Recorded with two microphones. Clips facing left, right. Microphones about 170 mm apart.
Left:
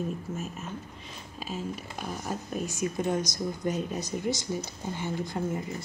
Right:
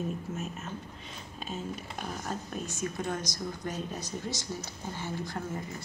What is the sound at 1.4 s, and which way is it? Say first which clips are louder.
Speech: left 2 dB; 5° left (ahead or behind).